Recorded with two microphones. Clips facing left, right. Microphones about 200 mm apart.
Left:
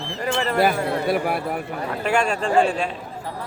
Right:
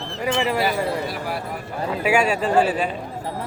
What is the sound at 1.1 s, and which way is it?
Speech, 60° left (ahead or behind).